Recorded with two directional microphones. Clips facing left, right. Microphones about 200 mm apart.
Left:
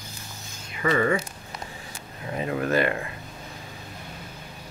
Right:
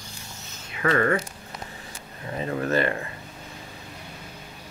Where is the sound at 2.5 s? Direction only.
30° right (ahead or behind).